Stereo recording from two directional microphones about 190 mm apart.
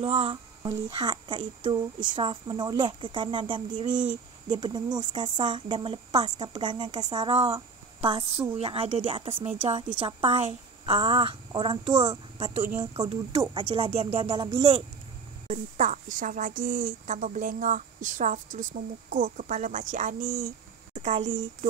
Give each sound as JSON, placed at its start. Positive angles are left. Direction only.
{"t": 0.0, "sound": "speech", "side_deg": -30}
{"t": 12.7, "sound": "speech", "side_deg": -20}
{"t": 15.4, "sound": "a woman's voice", "side_deg": -40}